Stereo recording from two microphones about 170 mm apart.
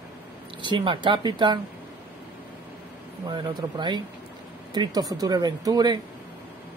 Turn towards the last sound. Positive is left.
turn(degrees=-25)  # may be behind; listen again after turning